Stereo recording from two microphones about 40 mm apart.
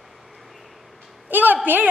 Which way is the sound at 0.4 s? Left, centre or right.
Centre.